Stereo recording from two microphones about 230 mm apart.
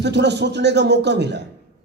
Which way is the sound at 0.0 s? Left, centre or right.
Right.